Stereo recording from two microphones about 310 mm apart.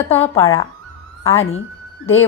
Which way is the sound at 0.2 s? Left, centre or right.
Centre.